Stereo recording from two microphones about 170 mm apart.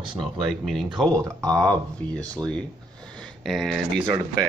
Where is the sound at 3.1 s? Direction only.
5° left (ahead or behind).